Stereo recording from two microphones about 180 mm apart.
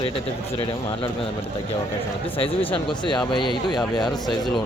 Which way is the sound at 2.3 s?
30° left (ahead or behind).